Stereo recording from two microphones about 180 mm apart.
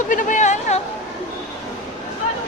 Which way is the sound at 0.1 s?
45° left (ahead or behind).